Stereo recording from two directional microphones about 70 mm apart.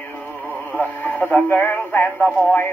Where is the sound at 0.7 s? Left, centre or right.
Left.